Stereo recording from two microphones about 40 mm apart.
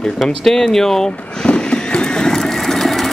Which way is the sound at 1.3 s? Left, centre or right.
Centre.